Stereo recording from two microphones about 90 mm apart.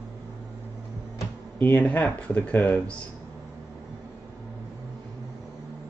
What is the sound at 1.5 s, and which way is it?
Speech, 20° left (ahead or behind).